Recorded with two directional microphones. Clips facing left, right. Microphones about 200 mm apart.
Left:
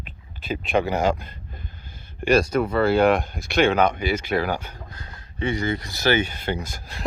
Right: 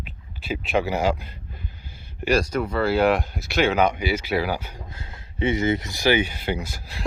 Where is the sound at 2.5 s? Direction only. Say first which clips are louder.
Left 3 dB; 55° left (ahead or behind).